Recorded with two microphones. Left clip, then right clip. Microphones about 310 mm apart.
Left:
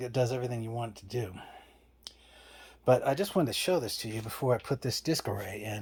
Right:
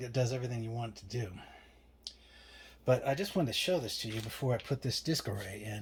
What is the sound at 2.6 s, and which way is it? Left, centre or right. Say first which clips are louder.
Speech: left 5 dB; centre.